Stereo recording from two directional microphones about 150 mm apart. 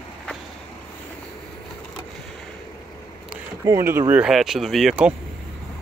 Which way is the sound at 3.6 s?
20° right (ahead or behind).